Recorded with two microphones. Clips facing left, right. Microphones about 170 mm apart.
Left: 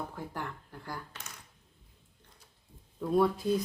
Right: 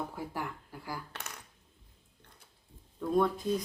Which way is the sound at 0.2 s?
5° right (ahead or behind).